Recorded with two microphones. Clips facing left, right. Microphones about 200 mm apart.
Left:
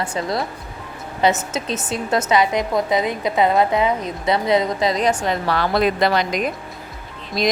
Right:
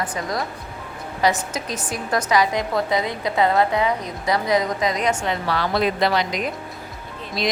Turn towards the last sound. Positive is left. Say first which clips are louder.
# left 4 dB
turn(degrees=45)  # may be behind; listen again after turning